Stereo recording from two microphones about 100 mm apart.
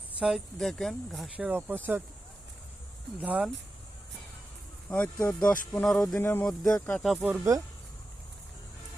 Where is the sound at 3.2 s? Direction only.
15° right (ahead or behind).